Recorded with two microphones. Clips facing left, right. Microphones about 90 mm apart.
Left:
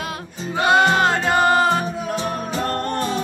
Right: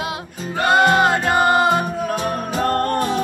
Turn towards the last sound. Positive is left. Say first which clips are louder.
# right 4 dB
turn(degrees=-50)  # may be behind; listen again after turning